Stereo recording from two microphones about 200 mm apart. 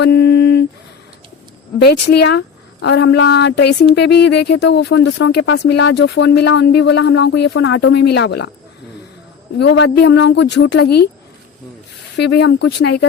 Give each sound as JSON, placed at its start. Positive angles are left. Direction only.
{"t": 0.0, "sound": "a sound", "side_deg": 55}
{"t": 1.8, "sound": "speech", "side_deg": 55}
{"t": 9.6, "sound": "speech", "side_deg": 60}
{"t": 12.1, "sound": "speech", "side_deg": 60}